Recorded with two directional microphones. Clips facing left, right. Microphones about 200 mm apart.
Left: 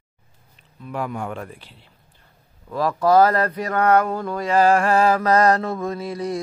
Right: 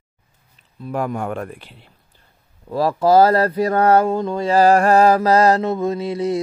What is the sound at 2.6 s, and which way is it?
Speech, 30° right (ahead or behind).